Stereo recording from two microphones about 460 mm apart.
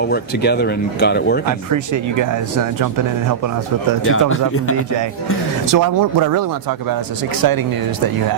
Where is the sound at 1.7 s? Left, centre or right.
Right.